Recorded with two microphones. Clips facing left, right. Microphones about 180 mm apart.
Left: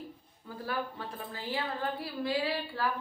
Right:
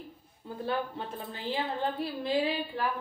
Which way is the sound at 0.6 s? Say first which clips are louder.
Right 3 dB; 25° right (ahead or behind).